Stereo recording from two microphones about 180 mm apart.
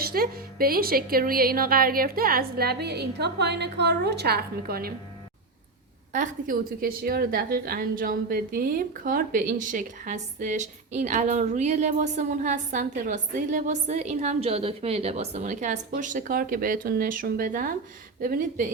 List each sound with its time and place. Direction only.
0.0 s a woman's voice: 55° right (ahead or behind)
6.1 s a woman's voice: 45° right (ahead or behind)